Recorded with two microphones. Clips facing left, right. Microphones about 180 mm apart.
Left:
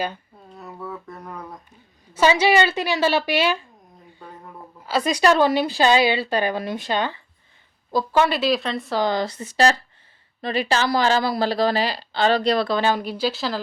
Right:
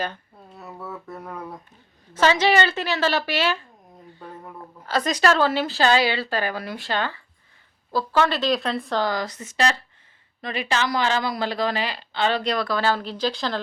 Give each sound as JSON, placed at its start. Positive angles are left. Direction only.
{"t": 0.5, "sound": "a sound", "side_deg": -5}
{"t": 2.1, "sound": "speech", "side_deg": 10}
{"t": 4.9, "sound": "speech", "side_deg": 10}
{"t": 9.0, "sound": "speech", "side_deg": 25}